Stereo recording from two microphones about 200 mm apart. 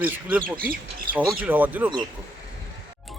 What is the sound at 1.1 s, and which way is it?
Speech, 10° right (ahead or behind).